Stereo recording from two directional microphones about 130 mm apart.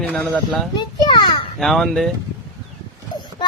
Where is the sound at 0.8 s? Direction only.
35° left (ahead or behind).